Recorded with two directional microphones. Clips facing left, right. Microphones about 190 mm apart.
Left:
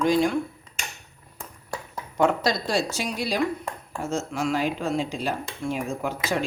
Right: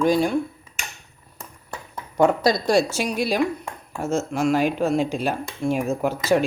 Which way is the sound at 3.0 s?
60° right (ahead or behind).